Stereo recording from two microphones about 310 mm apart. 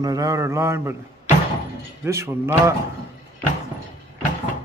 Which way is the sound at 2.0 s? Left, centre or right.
Centre.